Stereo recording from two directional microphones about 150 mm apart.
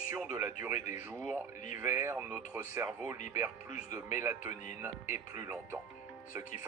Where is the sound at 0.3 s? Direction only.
55° left (ahead or behind).